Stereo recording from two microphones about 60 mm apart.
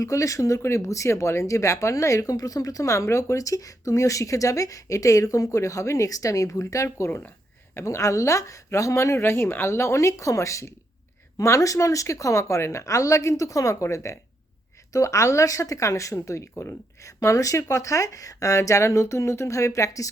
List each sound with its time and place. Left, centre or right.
0.0 s speech: left
7.9 s speech: left